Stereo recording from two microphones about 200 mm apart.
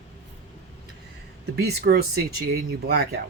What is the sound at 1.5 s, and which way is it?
Speech, 55° right (ahead or behind).